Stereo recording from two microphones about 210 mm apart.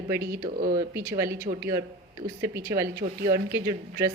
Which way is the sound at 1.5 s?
30° right (ahead or behind).